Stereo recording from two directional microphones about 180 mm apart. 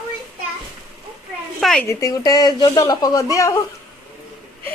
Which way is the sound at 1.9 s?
15° left (ahead or behind).